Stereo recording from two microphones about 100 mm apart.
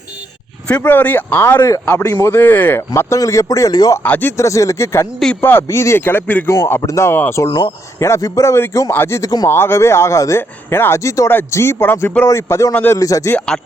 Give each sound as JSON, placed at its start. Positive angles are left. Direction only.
{"t": 0.7, "sound": "a man's voice", "side_deg": 20}
{"t": 4.0, "sound": "speech", "side_deg": 20}
{"t": 11.3, "sound": "a man's voice", "side_deg": 20}
{"t": 13.3, "sound": "speech", "side_deg": 5}